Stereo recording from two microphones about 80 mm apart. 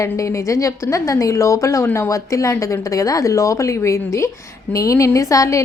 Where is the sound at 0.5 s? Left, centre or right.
Left.